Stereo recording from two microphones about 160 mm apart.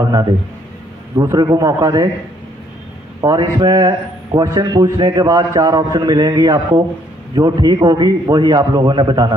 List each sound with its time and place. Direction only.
1.1 s a man's voice: 20° right (ahead or behind)
3.2 s a man's voice: 25° right (ahead or behind)